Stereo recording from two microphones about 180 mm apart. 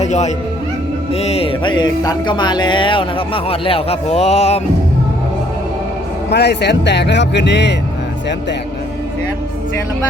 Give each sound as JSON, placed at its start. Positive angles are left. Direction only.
{"t": 0.0, "sound": "speech", "side_deg": 40}
{"t": 1.1, "sound": "music", "side_deg": 35}
{"t": 6.3, "sound": "speech", "side_deg": 70}